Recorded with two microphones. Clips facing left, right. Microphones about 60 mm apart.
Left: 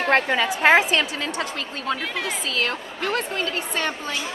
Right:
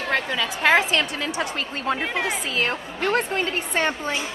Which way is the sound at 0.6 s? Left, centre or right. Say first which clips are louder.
Left 2 dB; centre.